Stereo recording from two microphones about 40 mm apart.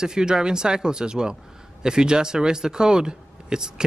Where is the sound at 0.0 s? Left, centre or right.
Centre.